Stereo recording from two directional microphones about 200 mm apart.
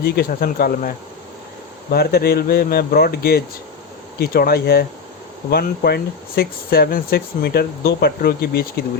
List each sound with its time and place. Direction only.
0.0 s speech: 50° left (ahead or behind)